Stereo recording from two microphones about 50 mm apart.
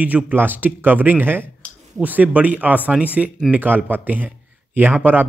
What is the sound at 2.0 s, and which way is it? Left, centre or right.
Speech, right.